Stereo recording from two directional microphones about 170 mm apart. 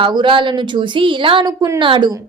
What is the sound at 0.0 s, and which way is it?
A woman's voice, 30° right (ahead or behind).